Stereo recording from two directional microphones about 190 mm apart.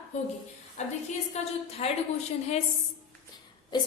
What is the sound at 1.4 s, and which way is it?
Speech, 35° left (ahead or behind).